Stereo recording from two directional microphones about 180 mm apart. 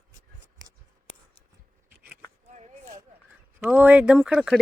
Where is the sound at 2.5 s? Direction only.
40° right (ahead or behind).